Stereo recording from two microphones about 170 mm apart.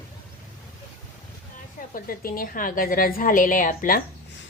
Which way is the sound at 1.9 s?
55° left (ahead or behind).